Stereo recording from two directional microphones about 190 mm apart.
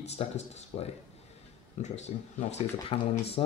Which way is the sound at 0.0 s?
35° left (ahead or behind).